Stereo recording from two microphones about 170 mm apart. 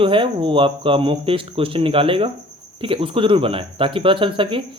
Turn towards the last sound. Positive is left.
turn(degrees=-30)  # may be behind; listen again after turning